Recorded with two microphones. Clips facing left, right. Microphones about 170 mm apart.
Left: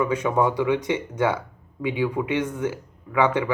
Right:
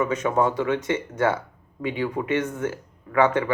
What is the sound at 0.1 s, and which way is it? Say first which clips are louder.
Speech: even; 10° left (ahead or behind).